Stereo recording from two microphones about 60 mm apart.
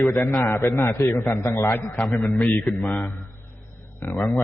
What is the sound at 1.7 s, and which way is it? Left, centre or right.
Speech, left.